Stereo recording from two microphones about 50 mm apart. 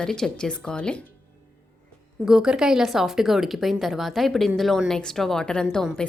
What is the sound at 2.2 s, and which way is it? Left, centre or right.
A woman's voice, centre.